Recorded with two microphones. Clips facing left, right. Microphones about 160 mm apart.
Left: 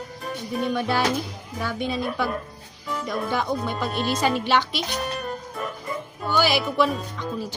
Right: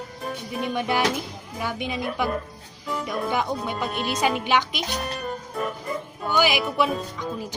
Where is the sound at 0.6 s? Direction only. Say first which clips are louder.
Even; 15° right (ahead or behind).